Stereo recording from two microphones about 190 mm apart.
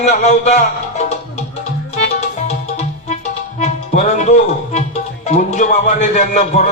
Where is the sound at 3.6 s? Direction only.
35° left (ahead or behind).